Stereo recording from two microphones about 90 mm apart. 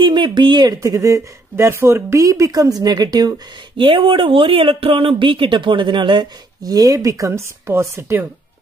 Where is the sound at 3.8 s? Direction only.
90° right; by 6.3 s 60° right (ahead or behind).